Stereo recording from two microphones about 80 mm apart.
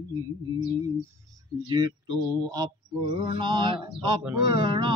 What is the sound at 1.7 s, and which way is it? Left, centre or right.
Speech, right.